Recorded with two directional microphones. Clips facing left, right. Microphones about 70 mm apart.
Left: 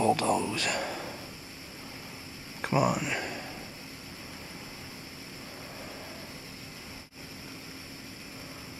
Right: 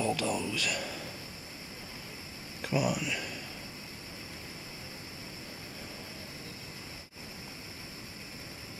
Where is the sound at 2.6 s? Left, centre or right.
Left.